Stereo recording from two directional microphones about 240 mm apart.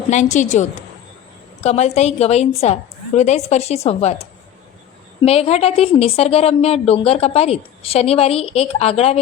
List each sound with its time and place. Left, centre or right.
0.1 s a woman's voice: left